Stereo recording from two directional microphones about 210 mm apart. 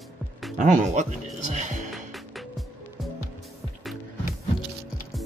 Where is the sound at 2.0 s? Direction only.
Centre (ahead or behind).